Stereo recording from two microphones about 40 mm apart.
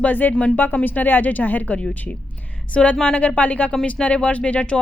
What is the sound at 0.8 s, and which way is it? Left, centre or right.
Speech, left.